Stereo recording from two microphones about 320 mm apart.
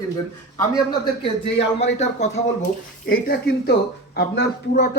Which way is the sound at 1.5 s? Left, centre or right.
Left.